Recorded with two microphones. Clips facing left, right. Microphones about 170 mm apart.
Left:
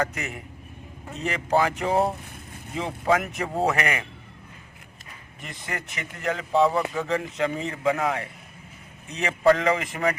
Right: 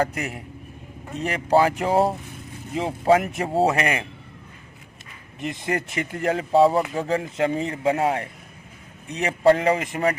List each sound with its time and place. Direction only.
0.0 s speech: 35° right (ahead or behind)
5.6 s speech: 35° right (ahead or behind)
9.2 s speech: 30° right (ahead or behind)